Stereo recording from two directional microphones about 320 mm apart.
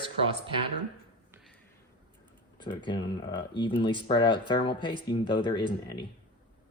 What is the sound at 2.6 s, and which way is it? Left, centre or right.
Speech, centre.